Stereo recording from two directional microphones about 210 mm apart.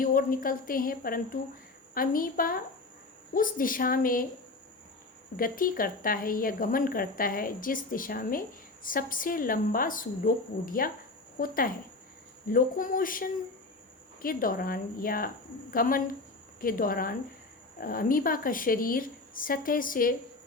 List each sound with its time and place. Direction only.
0.0 s a woman's voice: 40° left (ahead or behind)
5.4 s a woman's voice: 40° left (ahead or behind)